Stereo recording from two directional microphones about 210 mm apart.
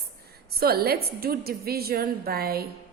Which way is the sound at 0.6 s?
45° right (ahead or behind).